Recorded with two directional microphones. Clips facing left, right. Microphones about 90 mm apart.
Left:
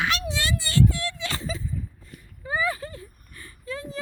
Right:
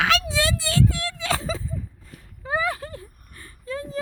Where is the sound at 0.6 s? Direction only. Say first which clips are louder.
Even; 90° right.